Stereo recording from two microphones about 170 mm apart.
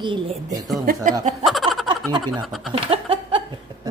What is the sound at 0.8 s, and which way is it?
Speech, 55° right (ahead or behind).